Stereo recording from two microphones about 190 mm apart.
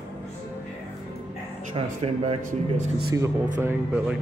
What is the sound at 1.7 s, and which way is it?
Speech, 35° right (ahead or behind).